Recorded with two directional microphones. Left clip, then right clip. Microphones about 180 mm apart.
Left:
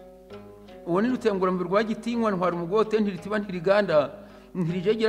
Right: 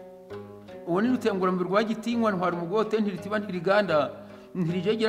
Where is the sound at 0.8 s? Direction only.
55° left (ahead or behind).